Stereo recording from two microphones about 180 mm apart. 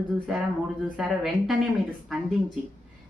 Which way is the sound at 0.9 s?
Centre (ahead or behind).